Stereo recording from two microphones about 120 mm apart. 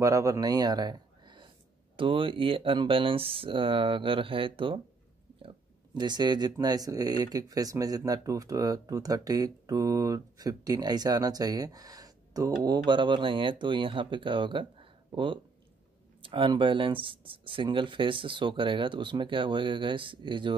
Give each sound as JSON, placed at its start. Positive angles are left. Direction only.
{"t": 0.0, "sound": "speech", "side_deg": -25}
{"t": 5.9, "sound": "speech", "side_deg": -35}